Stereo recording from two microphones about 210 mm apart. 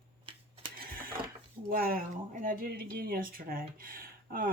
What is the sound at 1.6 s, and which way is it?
Speech, 45° right (ahead or behind).